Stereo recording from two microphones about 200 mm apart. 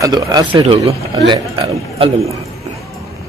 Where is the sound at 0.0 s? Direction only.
20° right (ahead or behind).